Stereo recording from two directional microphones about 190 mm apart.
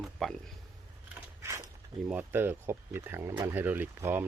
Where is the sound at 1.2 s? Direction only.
15° right (ahead or behind).